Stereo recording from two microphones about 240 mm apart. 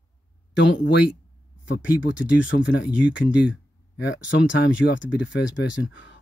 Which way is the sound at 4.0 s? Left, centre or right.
Left.